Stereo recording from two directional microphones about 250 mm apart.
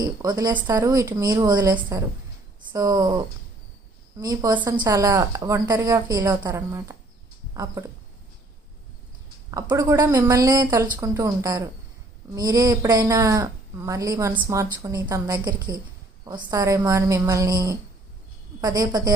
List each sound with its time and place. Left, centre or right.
0.0 s speech: centre
9.5 s speech: centre